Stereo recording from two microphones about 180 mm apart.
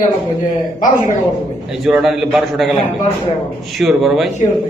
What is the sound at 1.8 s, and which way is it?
Speech, centre (ahead or behind).